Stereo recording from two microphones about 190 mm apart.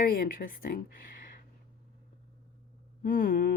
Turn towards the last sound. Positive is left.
turn(degrees=50)  # may be behind; listen again after turning